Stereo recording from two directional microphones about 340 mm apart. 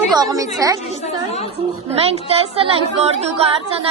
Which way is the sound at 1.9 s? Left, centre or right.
Centre.